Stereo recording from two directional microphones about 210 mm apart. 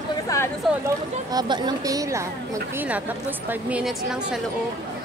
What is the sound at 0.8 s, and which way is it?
A woman's voice, 20° right (ahead or behind).